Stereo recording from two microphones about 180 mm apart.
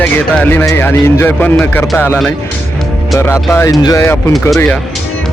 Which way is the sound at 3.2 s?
15° left (ahead or behind).